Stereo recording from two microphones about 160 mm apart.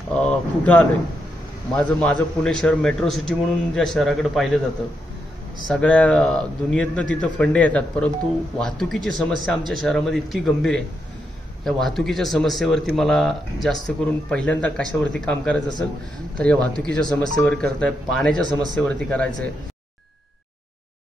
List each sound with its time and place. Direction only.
0.3 s a man's voice: 10° left (ahead or behind)
5.7 s a man's voice: 10° left (ahead or behind)
18.4 s speech: 25° right (ahead or behind)
18.8 s a man's voice: 10° left (ahead or behind)